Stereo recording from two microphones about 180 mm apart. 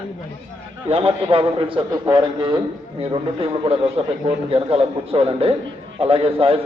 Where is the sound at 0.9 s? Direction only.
30° right (ahead or behind).